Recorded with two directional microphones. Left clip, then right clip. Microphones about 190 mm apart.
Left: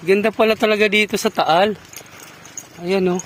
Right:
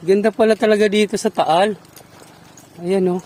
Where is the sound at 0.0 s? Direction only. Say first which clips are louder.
Right 1 dB; 25° right (ahead or behind).